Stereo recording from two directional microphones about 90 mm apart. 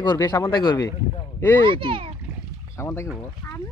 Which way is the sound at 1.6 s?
75° right (ahead or behind).